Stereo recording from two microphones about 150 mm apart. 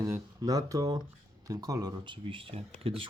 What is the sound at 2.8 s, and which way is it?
Speech, 40° right (ahead or behind).